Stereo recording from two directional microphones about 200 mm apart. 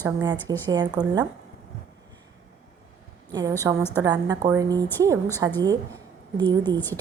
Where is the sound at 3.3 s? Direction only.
20° right (ahead or behind).